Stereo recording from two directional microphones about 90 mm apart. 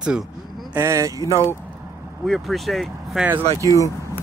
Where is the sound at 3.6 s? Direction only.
45° left (ahead or behind).